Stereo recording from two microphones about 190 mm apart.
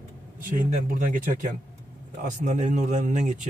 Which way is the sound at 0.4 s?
45° right (ahead or behind).